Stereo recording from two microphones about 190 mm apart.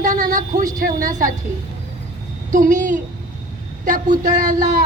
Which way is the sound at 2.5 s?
45° right (ahead or behind).